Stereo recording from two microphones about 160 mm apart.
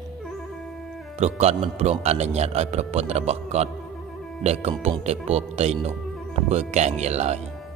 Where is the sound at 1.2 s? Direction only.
40° right (ahead or behind).